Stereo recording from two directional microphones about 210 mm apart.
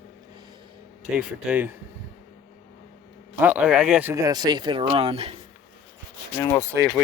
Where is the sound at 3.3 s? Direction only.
5° right (ahead or behind); by 5.4 s 30° right (ahead or behind).